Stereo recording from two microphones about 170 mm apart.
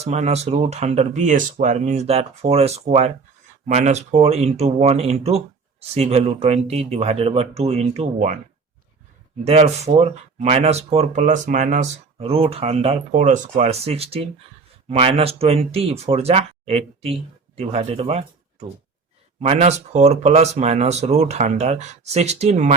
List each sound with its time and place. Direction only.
0.0 s speech: 40° right (ahead or behind)
9.4 s speech: 40° right (ahead or behind)
19.4 s speech: 40° right (ahead or behind)